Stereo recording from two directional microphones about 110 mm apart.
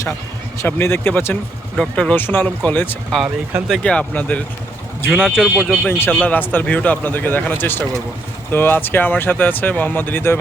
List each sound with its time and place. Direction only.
0.6 s speech: 20° left (ahead or behind)
5.2 s speech: 5° right (ahead or behind)
5.8 s speech: 10° left (ahead or behind)